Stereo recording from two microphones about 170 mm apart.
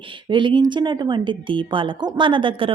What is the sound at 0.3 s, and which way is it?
Speech, 30° right (ahead or behind).